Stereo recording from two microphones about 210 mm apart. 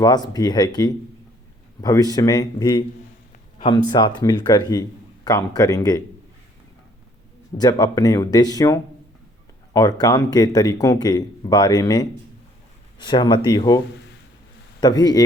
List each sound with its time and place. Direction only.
0.0 s speech: 20° left (ahead or behind)
7.6 s speech: 20° left (ahead or behind)